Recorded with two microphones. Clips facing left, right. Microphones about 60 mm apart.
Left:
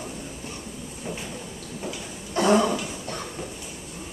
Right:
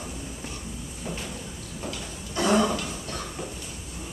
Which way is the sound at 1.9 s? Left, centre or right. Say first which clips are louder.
Left 1 dB; centre.